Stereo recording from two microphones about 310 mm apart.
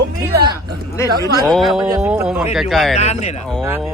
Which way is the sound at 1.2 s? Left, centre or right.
Centre.